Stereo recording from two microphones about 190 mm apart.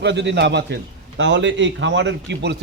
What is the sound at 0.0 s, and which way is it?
A man's voice, 65° right (ahead or behind).